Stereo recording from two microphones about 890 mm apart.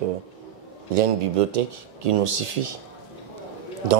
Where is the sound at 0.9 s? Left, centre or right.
Right.